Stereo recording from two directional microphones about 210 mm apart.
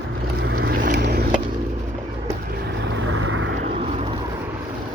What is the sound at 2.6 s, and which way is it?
Vehicle, 55° right (ahead or behind).